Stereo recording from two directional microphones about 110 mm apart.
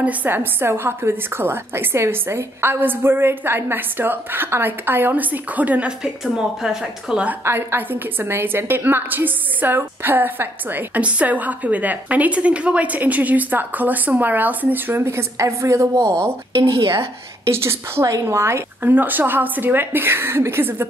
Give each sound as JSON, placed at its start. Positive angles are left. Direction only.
{"t": 0.0, "sound": "a woman's voice", "side_deg": -15}
{"t": 7.4, "sound": "a woman's voice", "side_deg": -20}
{"t": 16.5, "sound": "speech", "side_deg": -55}
{"t": 17.5, "sound": "a woman's voice", "side_deg": -25}